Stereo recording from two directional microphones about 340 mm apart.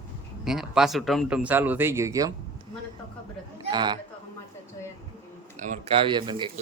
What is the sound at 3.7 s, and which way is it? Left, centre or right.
Speech, centre.